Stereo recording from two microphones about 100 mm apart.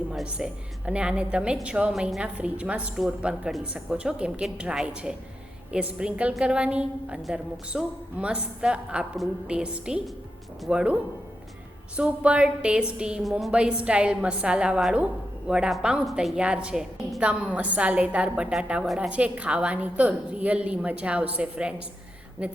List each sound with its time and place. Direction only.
0.1 s a woman's voice: 10° right (ahead or behind)